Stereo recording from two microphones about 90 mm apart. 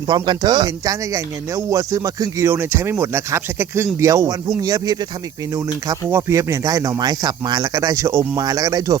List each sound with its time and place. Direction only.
0.1 s speech: 50° right (ahead or behind)
2.5 s speech: 25° right (ahead or behind)
4.3 s speech: 45° right (ahead or behind)
6.1 s speech: 30° right (ahead or behind)